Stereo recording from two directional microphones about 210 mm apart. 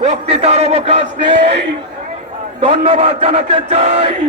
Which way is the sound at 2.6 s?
25° right (ahead or behind).